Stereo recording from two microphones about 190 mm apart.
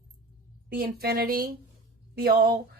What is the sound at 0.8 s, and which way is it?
A woman's voice, 55° right (ahead or behind).